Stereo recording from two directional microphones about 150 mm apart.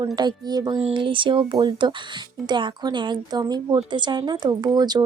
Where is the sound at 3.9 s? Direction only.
30° right (ahead or behind).